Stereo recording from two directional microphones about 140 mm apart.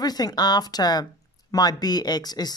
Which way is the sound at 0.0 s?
30° left (ahead or behind).